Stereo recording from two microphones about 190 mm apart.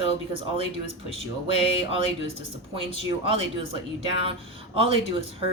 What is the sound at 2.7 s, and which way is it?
Speech, 30° right (ahead or behind).